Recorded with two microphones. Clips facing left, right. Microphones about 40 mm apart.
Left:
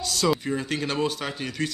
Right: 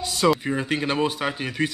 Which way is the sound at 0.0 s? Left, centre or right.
Right.